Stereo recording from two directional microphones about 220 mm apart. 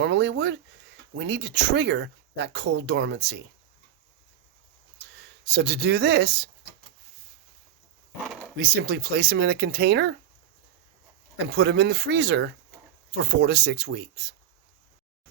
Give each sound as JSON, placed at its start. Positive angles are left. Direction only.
{"t": 0.0, "sound": "speech", "side_deg": -55}
{"t": 5.5, "sound": "speech", "side_deg": -50}
{"t": 8.3, "sound": "a sound", "side_deg": -5}
{"t": 8.5, "sound": "speech", "side_deg": -45}
{"t": 11.5, "sound": "speech", "side_deg": -50}